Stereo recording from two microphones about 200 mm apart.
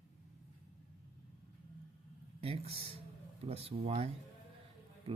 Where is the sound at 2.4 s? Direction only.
30° right (ahead or behind).